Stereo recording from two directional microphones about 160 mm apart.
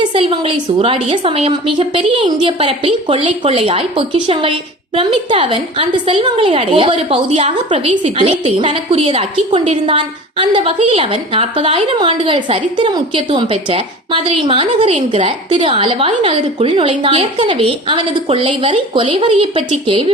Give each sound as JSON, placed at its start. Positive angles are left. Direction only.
{"t": 0.0, "sound": "a woman's voice", "side_deg": -35}